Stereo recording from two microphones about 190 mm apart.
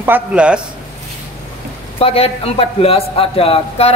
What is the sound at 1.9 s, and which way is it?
A man's voice, 30° left (ahead or behind).